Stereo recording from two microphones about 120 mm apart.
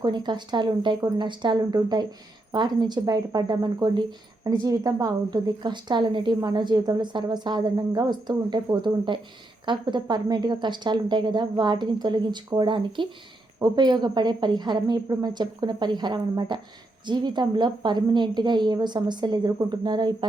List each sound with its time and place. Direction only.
0.0 s a woman's voice: 40° right (ahead or behind)